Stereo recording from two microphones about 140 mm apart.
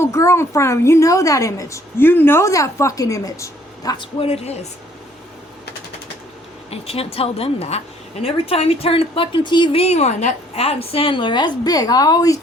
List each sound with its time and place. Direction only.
0.0 s a woman's voice: 20° left (ahead or behind); by 4.6 s 45° left (ahead or behind)
6.7 s a woman's voice: 45° left (ahead or behind); by 12.4 s 25° left (ahead or behind)